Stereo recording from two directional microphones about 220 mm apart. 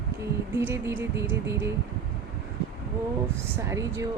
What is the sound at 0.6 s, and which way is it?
Speech, 10° right (ahead or behind).